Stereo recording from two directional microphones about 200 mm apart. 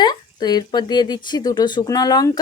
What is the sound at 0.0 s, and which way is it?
Speech, 20° left (ahead or behind).